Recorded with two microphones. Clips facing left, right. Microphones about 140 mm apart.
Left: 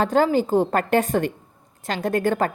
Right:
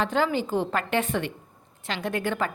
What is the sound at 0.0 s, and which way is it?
A woman's voice, 40° left (ahead or behind).